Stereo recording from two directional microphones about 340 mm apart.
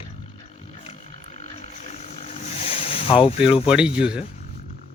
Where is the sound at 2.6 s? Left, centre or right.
Centre.